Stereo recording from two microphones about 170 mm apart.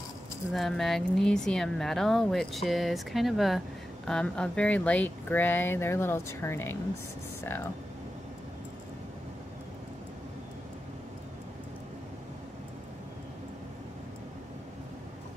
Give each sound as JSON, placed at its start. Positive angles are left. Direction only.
{"t": 0.5, "sound": "speech", "side_deg": 0}